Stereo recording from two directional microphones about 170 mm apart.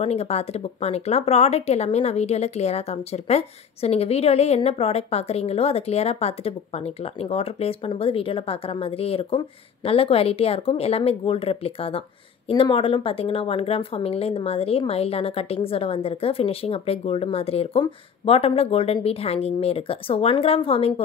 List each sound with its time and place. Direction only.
0.0 s speech: 40° left (ahead or behind)